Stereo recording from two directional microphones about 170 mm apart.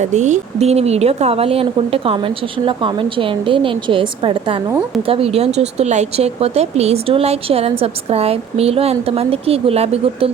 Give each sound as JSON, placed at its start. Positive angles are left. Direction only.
{"t": 0.0, "sound": "speech", "side_deg": -45}